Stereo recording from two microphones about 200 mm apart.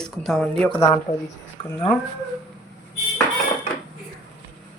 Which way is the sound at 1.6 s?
25° left (ahead or behind).